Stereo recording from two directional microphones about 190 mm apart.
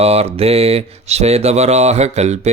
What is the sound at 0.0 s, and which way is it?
Speech, 30° right (ahead or behind).